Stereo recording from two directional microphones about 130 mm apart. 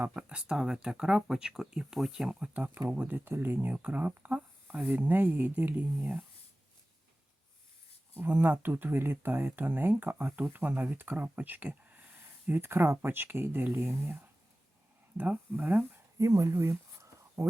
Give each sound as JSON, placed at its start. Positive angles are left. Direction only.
{"t": 0.0, "sound": "speech", "side_deg": -10}
{"t": 8.2, "sound": "speech", "side_deg": -15}
{"t": 16.1, "sound": "a sound", "side_deg": -25}